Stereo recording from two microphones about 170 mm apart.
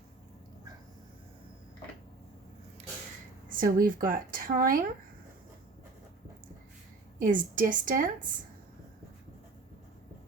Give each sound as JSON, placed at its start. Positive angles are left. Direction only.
{"t": 3.5, "sound": "a woman's voice", "side_deg": -55}
{"t": 7.2, "sound": "a woman's voice", "side_deg": -50}